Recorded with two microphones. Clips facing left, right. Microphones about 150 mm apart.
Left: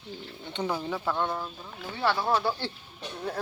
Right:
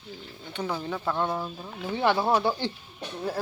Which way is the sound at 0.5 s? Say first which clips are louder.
Left 1 dB; 20° left (ahead or behind).